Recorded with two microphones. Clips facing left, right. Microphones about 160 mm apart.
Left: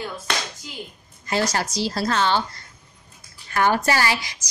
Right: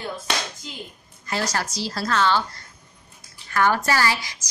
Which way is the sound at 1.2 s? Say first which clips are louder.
Left 3 dB; 20° left (ahead or behind).